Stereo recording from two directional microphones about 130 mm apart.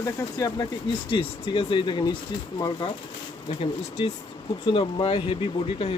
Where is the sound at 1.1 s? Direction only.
40° left (ahead or behind).